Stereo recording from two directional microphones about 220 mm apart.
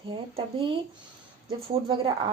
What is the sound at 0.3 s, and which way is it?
A woman's voice, 25° right (ahead or behind).